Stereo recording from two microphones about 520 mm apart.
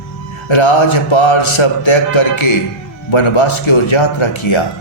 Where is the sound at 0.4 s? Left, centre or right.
Left.